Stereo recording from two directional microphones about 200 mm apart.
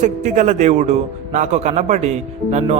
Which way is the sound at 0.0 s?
40° right (ahead or behind).